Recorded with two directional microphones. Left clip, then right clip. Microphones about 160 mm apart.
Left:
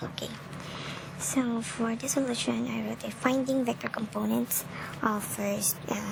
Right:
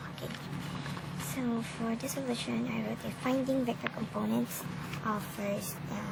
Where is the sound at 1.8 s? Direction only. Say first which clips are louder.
Left 6 dB; 50° left (ahead or behind).